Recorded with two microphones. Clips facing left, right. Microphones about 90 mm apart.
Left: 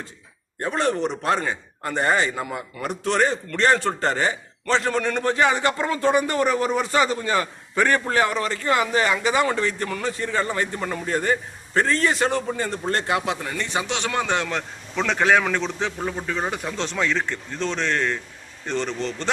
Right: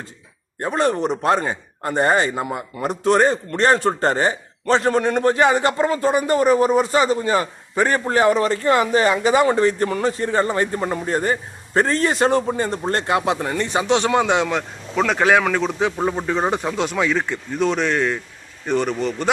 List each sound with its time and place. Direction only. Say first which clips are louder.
0.8 s a man's voice: right 4 dB; 40° right (ahead or behind)
5.3 s a man's voice: right 1 dB; 40° right (ahead or behind)
14.1 s speech: right 6 dB; 15° right (ahead or behind)
16.0 s speech: right 6 dB; 30° right (ahead or behind)
16.6 s speech: right 4 dB; 10° right (ahead or behind)